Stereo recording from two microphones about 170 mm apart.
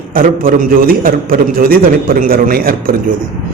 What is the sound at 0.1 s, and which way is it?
A man's voice, 55° right (ahead or behind).